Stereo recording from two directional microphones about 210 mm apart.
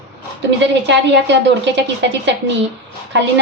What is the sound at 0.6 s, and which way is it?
A woman's voice, 60° right (ahead or behind).